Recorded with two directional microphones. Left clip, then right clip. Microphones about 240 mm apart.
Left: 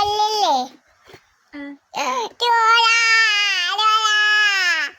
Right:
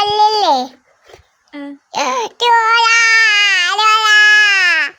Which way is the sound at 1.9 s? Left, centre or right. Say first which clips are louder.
Right 5 dB; centre.